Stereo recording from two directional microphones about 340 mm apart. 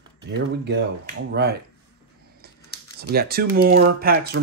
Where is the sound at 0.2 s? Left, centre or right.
Right.